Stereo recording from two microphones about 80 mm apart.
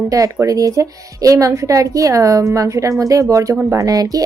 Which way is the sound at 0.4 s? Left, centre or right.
Right.